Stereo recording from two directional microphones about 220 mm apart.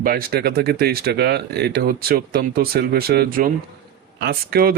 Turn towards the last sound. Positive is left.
turn(degrees=-45)  # may be behind; listen again after turning